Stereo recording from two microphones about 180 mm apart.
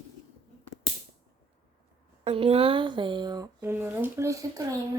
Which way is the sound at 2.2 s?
35° right (ahead or behind).